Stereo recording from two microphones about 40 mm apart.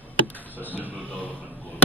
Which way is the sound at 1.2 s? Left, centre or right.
Left.